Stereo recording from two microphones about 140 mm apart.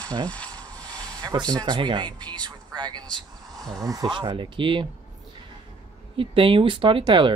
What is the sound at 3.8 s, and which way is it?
Speech, 25° right (ahead or behind).